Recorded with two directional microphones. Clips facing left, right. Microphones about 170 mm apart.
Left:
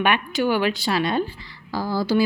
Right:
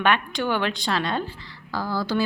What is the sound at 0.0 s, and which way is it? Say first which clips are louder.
A woman's voice: left 2 dB; 10° left (ahead or behind).